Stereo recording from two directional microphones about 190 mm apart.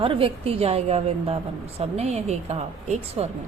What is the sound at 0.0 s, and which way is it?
A woman's voice, 30° right (ahead or behind).